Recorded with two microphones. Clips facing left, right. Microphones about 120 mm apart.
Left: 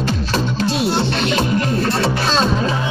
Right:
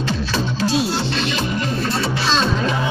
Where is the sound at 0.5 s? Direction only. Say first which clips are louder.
Left 1 dB; 60° left (ahead or behind).